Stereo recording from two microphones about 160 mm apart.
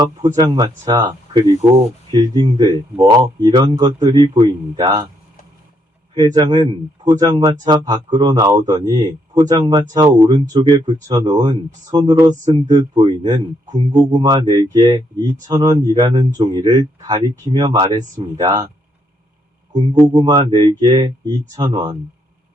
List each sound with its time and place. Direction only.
0.0 s speech: 25° right (ahead or behind)
6.1 s speech: 25° right (ahead or behind)
19.7 s speech: 30° right (ahead or behind)